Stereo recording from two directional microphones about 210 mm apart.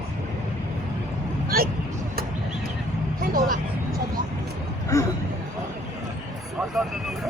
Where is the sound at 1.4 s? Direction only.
45° right (ahead or behind).